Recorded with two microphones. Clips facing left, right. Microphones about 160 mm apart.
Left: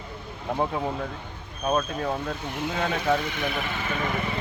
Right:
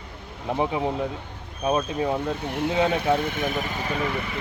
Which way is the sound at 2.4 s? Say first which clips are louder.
Right 4 dB; 65° right (ahead or behind).